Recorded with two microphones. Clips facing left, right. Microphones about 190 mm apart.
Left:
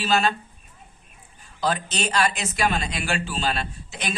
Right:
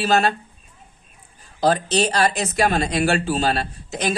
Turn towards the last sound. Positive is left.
turn(degrees=-40)  # may be behind; listen again after turning